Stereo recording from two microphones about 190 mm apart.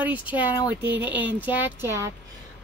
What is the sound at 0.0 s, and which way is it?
Speech, 10° right (ahead or behind).